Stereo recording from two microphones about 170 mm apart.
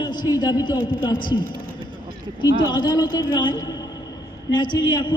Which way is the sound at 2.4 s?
25° left (ahead or behind).